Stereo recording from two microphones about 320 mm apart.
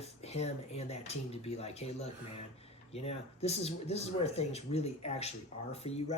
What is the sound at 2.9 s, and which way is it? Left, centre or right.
Speech, centre.